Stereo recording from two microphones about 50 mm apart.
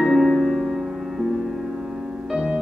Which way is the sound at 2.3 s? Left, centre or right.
Centre.